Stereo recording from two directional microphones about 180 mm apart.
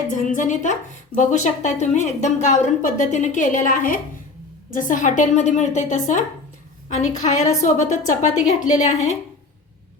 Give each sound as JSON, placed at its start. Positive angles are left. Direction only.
{"t": 0.3, "sound": "a woman's voice", "side_deg": 45}